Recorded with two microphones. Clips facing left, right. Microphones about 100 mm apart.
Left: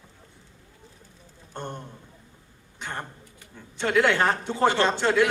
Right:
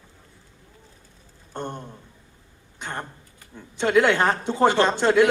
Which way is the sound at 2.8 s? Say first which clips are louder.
Right 2 dB; 15° right (ahead or behind).